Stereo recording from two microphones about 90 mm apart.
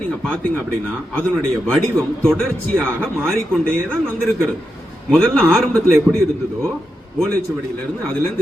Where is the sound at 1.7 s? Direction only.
10° left (ahead or behind).